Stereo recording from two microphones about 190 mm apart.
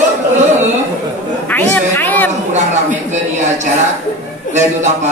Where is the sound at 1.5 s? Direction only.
10° left (ahead or behind).